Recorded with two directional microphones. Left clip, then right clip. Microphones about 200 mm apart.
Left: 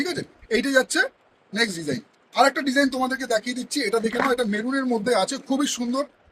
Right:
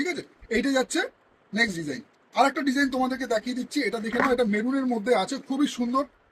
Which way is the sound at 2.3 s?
50° left (ahead or behind).